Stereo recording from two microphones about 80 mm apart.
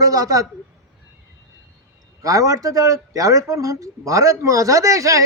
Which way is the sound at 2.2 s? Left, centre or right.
Right.